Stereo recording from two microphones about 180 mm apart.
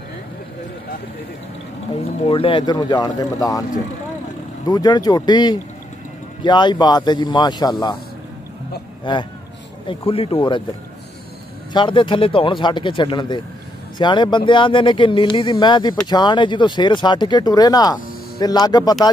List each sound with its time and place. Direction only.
2.1 s speech: 30° left (ahead or behind)
9.8 s speech: 30° left (ahead or behind)
11.7 s speech: 25° left (ahead or behind)